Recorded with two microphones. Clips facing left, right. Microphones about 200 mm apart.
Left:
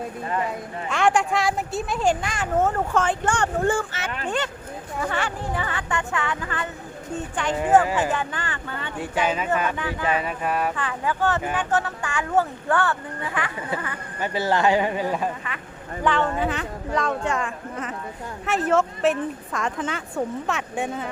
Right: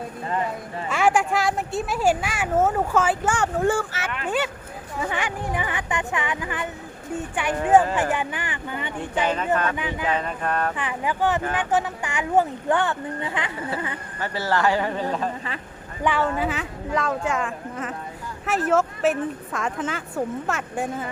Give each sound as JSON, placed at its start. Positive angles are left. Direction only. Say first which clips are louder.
{"t": 0.9, "sound": "speech", "louder": "even", "side_deg": -5}
{"t": 9.0, "sound": "speech", "louder": "left 1 dB", "side_deg": 10}
{"t": 9.7, "sound": "speech", "louder": "even", "side_deg": -15}
{"t": 10.1, "sound": "speech", "louder": "left 1 dB", "side_deg": 10}
{"t": 10.8, "sound": "speech", "louder": "even", "side_deg": -15}
{"t": 14.2, "sound": "speech", "louder": "left 2 dB", "side_deg": 15}
{"t": 16.0, "sound": "speech", "louder": "even", "side_deg": -5}